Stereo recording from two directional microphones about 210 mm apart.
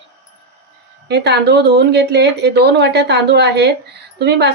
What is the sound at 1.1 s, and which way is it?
A woman's voice, 55° right (ahead or behind).